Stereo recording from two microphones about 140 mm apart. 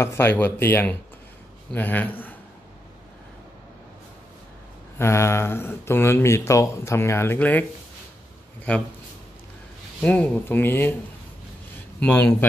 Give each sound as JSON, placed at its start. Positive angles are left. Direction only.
{"t": 0.0, "sound": "speech", "side_deg": 15}
{"t": 4.9, "sound": "speech", "side_deg": 20}
{"t": 8.7, "sound": "speech", "side_deg": 10}
{"t": 10.0, "sound": "speech", "side_deg": 10}
{"t": 12.0, "sound": "speech", "side_deg": 10}